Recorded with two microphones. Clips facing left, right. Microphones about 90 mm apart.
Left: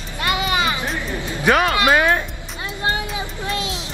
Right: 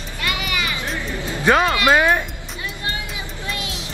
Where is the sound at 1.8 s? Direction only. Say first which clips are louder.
Right 1 dB; 20° right (ahead or behind).